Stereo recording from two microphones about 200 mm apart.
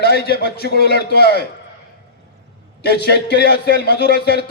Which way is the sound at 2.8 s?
55° left (ahead or behind).